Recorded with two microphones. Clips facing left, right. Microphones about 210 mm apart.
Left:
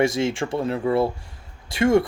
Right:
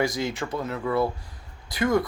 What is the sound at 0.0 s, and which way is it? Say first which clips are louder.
Speech: left 5 dB; 25° left (ahead or behind).